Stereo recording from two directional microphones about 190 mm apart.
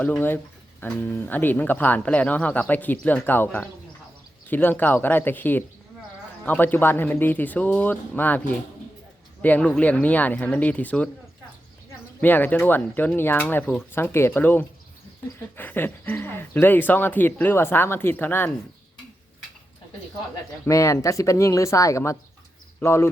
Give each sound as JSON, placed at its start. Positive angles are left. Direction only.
{"t": 0.0, "sound": "speech", "side_deg": 10}
{"t": 12.2, "sound": "speech", "side_deg": 10}
{"t": 20.7, "sound": "speech", "side_deg": 15}